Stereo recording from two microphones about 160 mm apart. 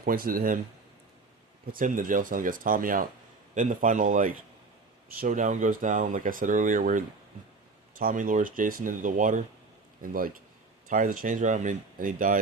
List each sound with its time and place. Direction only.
0.0 s speech: 65° right (ahead or behind)
1.7 s speech: 55° right (ahead or behind)